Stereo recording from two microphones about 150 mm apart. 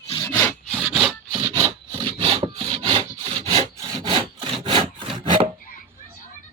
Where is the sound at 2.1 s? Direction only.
35° right (ahead or behind).